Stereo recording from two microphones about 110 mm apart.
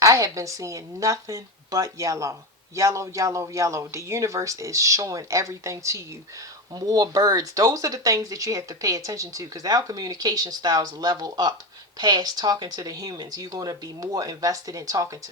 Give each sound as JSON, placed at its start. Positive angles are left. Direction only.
{"t": 0.0, "sound": "a man's voice", "side_deg": -30}